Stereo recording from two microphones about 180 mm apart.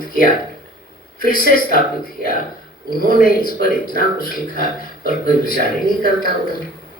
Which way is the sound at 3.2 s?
50° left (ahead or behind).